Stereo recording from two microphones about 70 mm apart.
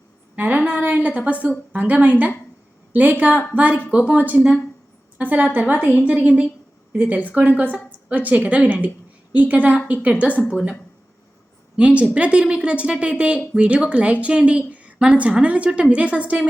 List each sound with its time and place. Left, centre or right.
0.3 s a sound: right
1.7 s a woman's voice: right
11.8 s a woman's voice: centre